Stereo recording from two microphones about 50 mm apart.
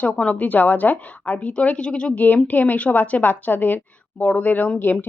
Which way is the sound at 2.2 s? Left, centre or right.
Left.